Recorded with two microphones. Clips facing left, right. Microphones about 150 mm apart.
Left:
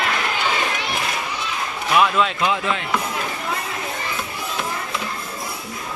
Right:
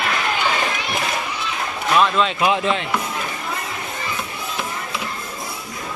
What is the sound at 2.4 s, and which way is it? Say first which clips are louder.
Speech: right 3 dB; 20° right (ahead or behind).